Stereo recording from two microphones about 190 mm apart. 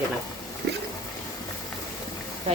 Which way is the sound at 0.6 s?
55° right (ahead or behind).